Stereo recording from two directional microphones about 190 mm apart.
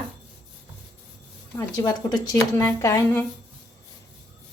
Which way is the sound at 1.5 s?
20° left (ahead or behind).